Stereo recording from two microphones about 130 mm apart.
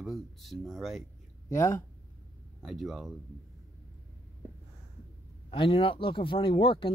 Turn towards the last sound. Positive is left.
turn(degrees=45)  # may be behind; listen again after turning